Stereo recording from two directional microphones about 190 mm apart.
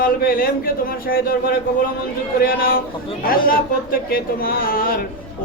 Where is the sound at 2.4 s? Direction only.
50° left (ahead or behind).